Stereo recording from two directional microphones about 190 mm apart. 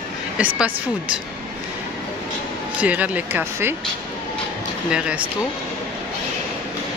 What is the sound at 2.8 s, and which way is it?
Speech, 10° right (ahead or behind).